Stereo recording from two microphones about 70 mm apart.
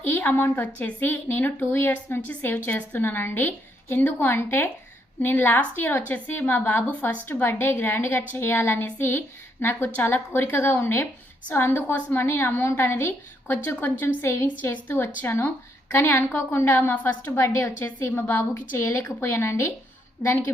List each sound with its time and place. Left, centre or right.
0.0 s a woman's voice: left
15.0 s a woman's voice: left